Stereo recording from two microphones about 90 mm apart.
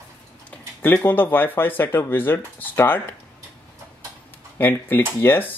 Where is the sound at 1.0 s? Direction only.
20° left (ahead or behind).